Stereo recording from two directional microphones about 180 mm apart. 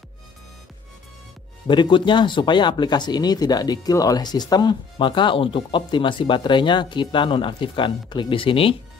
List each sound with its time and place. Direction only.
1.7 s speech: 25° left (ahead or behind)